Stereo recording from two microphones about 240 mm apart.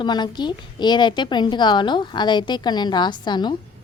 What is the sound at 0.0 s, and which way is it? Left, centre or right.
A woman's voice, centre.